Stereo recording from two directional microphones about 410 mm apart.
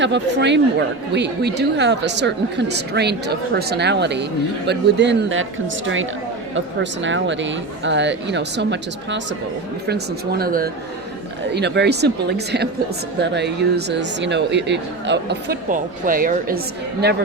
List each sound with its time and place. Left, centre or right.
0.0 s speech: right